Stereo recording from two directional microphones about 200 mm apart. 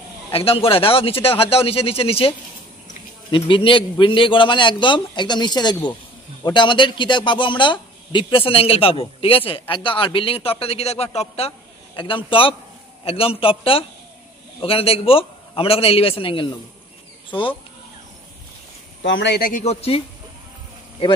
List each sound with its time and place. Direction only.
0.3 s a man's voice: 30° left (ahead or behind)
19.0 s speech: 65° left (ahead or behind)
19.6 s speech: 30° left (ahead or behind)